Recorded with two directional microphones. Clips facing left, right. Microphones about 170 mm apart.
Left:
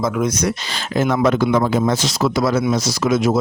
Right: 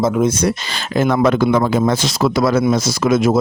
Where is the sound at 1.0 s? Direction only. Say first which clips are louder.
Right 2 dB; 60° right (ahead or behind).